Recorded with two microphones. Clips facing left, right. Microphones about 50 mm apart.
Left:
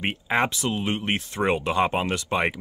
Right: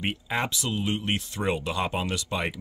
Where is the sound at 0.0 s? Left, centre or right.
Left.